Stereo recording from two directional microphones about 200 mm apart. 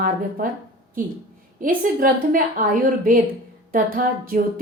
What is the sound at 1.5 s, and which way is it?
Speech, 45° right (ahead or behind).